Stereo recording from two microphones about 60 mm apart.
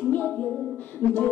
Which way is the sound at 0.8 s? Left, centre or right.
Left.